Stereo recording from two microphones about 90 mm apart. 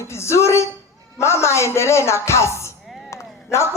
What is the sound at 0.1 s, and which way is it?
A man's voice, 30° left (ahead or behind).